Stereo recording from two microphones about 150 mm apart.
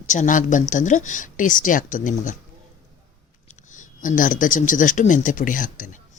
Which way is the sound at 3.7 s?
60° left (ahead or behind).